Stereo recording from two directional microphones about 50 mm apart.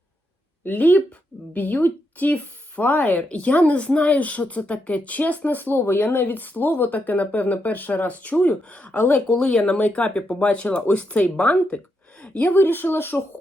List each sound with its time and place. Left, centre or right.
0.6 s speech: left